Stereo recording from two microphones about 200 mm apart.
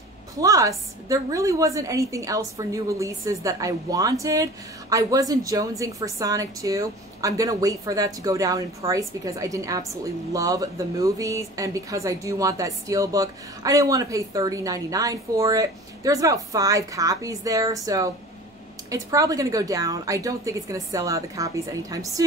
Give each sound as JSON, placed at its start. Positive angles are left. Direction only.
{"t": 0.4, "sound": "a woman's voice", "side_deg": -15}